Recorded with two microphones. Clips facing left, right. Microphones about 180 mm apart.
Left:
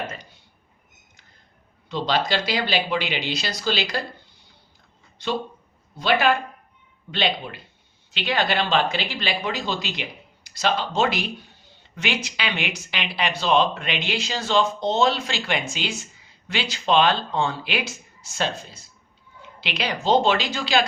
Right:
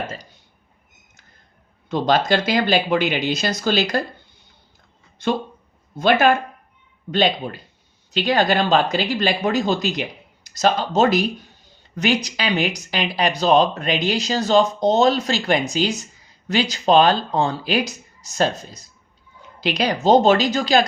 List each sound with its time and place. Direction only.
1.9 s speech: 50° right (ahead or behind)
5.1 s speech: 50° right (ahead or behind)